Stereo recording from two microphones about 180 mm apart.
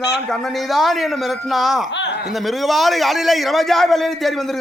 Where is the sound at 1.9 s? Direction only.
80° left.